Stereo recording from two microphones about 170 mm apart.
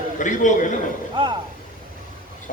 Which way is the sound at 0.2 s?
45° left (ahead or behind).